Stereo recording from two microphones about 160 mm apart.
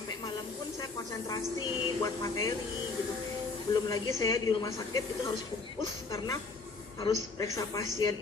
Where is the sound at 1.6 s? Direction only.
20° left (ahead or behind).